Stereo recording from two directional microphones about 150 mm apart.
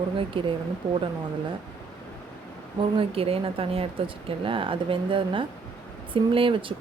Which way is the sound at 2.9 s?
40° right (ahead or behind).